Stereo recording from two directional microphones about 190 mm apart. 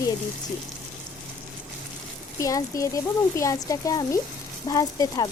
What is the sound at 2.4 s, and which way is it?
Speech, 15° left (ahead or behind).